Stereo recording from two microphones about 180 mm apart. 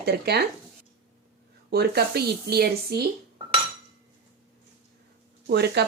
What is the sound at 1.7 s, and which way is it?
A woman's voice, 60° right (ahead or behind).